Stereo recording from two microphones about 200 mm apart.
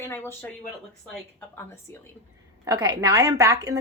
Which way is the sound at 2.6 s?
15° right (ahead or behind).